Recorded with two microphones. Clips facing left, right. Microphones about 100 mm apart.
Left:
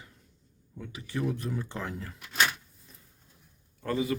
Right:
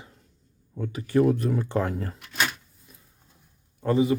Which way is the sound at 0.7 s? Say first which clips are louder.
Right 12 dB; 50° right (ahead or behind).